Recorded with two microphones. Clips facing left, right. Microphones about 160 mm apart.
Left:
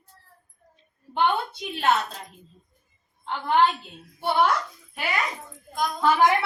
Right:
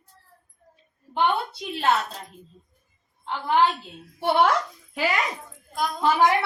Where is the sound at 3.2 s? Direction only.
Centre (ahead or behind).